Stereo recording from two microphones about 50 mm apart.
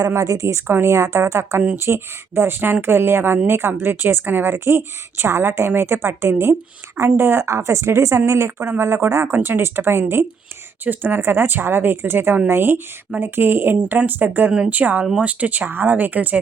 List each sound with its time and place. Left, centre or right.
0.1 s a woman's voice: right
7.4 s a woman's voice: right